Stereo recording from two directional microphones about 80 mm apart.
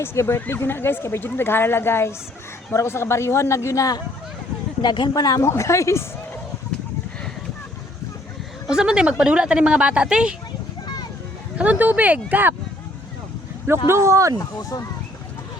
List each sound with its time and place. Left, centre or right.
0.0 s a man's voice: left
4.8 s speech: left
5.4 s a man's voice: left
8.7 s speech: centre
11.5 s speech: centre
13.7 s speech: right
14.3 s speech: left